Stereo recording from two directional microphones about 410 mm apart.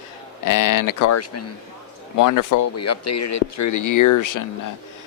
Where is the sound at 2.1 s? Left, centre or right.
Left.